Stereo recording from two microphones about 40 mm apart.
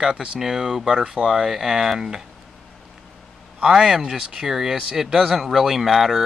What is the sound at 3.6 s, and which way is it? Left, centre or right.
Speech, centre.